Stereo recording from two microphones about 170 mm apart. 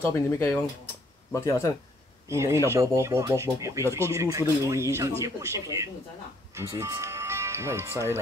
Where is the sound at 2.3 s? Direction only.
15° right (ahead or behind).